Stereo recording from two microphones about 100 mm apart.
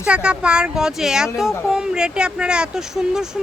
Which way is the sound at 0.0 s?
10° right (ahead or behind).